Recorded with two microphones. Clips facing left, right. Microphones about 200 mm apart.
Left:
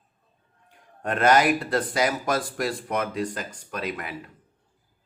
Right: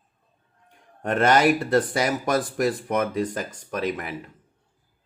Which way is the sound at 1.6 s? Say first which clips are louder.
Right 3 dB; 25° right (ahead or behind).